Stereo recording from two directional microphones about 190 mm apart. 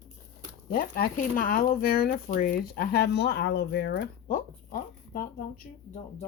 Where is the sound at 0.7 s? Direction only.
50° left (ahead or behind).